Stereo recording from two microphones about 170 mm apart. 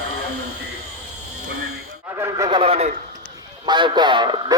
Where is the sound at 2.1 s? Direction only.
20° right (ahead or behind).